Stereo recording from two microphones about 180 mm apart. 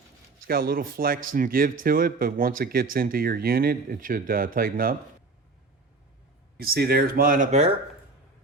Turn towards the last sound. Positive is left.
turn(degrees=-35)  # may be behind; listen again after turning